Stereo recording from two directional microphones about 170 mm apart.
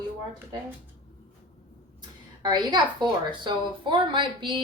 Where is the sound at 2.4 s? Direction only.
25° right (ahead or behind).